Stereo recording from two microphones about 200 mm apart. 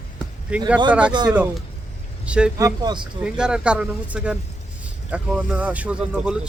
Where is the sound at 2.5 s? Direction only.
20° right (ahead or behind).